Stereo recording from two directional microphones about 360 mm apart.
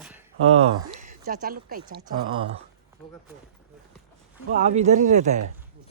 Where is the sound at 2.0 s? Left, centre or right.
Centre.